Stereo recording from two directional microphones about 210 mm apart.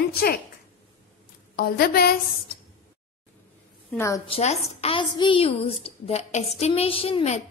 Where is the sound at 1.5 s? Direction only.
50° left (ahead or behind).